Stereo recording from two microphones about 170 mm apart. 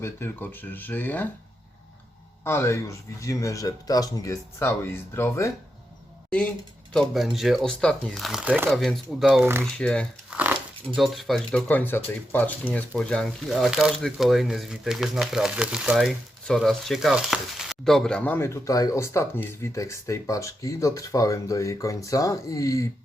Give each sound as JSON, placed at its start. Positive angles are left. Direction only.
{"t": 0.0, "sound": "speech", "side_deg": 10}
{"t": 2.4, "sound": "speech", "side_deg": 15}
{"t": 6.9, "sound": "speech", "side_deg": 0}
{"t": 8.7, "sound": "speech", "side_deg": 0}
{"t": 9.7, "sound": "speech", "side_deg": 5}
{"t": 10.2, "sound": "crumpling", "side_deg": -10}
{"t": 10.8, "sound": "speech", "side_deg": 0}